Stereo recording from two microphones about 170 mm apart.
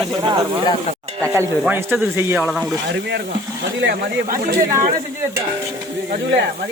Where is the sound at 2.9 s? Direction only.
85° right.